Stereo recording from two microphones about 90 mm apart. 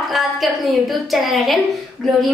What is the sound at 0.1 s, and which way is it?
A woman's voice, centre (ahead or behind).